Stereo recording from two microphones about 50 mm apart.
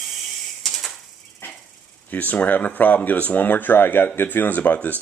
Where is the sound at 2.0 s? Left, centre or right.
Left.